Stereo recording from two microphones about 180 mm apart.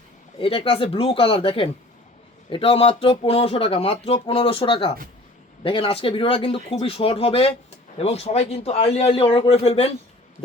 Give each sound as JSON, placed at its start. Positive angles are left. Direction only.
{"t": 0.3, "sound": "speech", "side_deg": 30}